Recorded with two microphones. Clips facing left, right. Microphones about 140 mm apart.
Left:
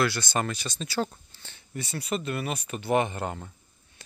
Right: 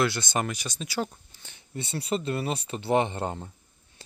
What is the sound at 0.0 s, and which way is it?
Speech, 20° right (ahead or behind).